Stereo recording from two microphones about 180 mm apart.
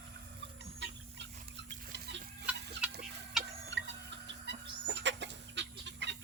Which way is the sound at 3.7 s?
75° right (ahead or behind).